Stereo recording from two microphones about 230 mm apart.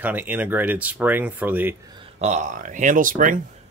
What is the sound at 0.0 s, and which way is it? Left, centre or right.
Speech, centre.